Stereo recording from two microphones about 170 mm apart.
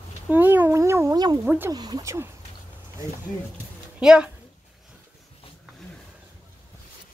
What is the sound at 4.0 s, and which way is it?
Speech, 5° right (ahead or behind).